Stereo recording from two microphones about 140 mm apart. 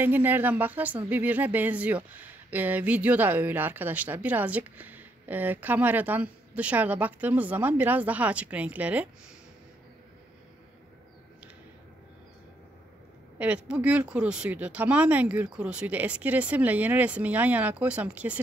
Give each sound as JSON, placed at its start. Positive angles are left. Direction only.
{"t": 0.0, "sound": "speech", "side_deg": -15}
{"t": 13.4, "sound": "speech", "side_deg": -10}